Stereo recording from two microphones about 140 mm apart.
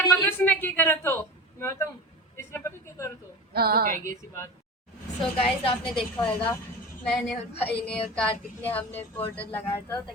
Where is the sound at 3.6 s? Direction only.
90° right.